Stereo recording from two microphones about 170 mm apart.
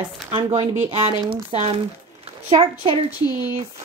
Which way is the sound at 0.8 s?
25° right (ahead or behind).